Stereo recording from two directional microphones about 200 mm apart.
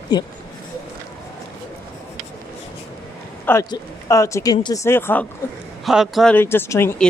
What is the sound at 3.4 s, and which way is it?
Speech, 15° left (ahead or behind).